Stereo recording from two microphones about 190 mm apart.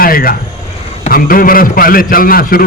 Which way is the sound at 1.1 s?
50° left (ahead or behind).